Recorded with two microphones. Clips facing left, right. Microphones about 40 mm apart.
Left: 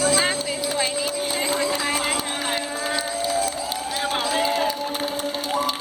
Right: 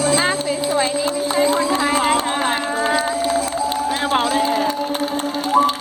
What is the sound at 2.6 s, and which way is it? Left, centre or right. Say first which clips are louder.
Run: right 8 dB; right.